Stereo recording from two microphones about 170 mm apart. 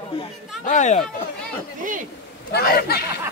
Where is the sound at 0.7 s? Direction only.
45° left (ahead or behind).